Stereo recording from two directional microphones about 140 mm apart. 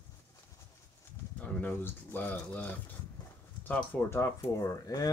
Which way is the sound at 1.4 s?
10° left (ahead or behind).